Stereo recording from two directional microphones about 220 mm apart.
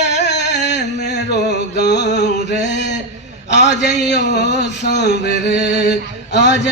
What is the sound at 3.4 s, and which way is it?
A man's voice, 50° left (ahead or behind).